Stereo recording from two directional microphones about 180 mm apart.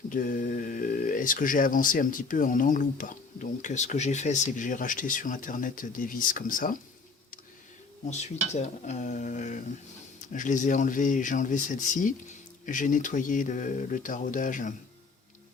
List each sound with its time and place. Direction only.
0.1 s speech: 50° left (ahead or behind)
8.1 s speech: 40° left (ahead or behind)